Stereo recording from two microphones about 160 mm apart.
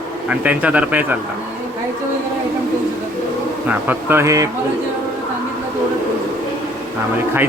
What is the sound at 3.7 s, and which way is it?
Speech, 10° right (ahead or behind).